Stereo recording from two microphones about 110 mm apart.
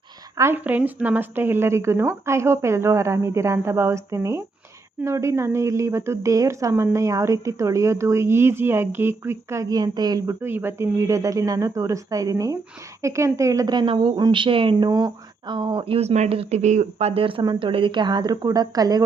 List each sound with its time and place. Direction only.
0.3 s speech: 25° right (ahead or behind)
0.6 s a woman's voice: 15° right (ahead or behind); by 14.8 s 50° right (ahead or behind)
14.8 s a woman's voice: 35° right (ahead or behind)